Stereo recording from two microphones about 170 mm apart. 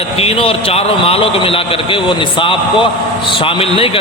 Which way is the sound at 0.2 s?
35° left (ahead or behind).